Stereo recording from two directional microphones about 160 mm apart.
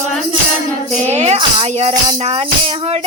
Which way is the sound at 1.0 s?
45° right (ahead or behind).